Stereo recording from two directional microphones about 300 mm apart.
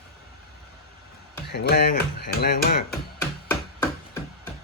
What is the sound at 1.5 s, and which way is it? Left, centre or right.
Speech, left.